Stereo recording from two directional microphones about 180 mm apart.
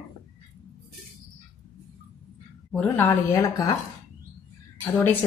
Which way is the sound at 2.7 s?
15° left (ahead or behind).